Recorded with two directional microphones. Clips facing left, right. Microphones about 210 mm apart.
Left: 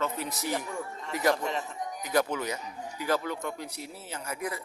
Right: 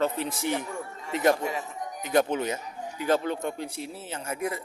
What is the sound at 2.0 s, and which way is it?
Speech, 25° right (ahead or behind).